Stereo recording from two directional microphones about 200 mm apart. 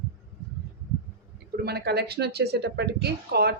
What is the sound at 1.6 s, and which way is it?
A woman's voice, 50° right (ahead or behind).